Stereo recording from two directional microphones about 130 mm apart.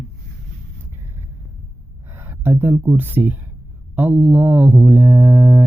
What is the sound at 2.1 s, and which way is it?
Speech, 15° right (ahead or behind).